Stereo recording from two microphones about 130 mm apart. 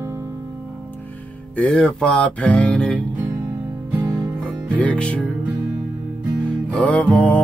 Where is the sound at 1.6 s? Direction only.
5° left (ahead or behind).